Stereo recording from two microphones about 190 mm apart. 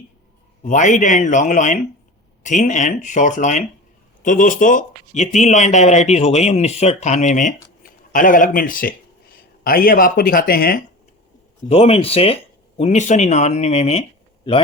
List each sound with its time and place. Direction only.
0.6 s speech: 40° left (ahead or behind)
11.7 s speech: 30° left (ahead or behind)